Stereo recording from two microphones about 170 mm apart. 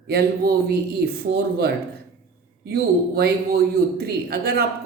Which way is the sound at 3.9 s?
65° right (ahead or behind).